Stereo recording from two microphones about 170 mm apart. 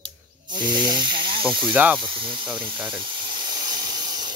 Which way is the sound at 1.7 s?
10° right (ahead or behind).